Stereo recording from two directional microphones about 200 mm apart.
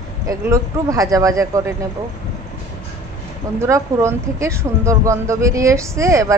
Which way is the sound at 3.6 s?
15° right (ahead or behind).